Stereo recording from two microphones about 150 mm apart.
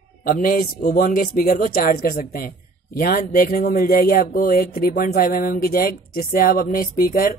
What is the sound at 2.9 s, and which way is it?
Speech, 70° left (ahead or behind).